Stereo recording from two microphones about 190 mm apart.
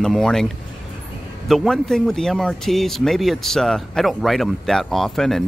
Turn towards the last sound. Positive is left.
turn(degrees=0)  # may be behind; listen again after turning